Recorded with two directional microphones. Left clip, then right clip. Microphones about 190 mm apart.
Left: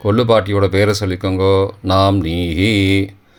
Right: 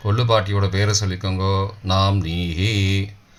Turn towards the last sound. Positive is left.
turn(degrees=45)  # may be behind; listen again after turning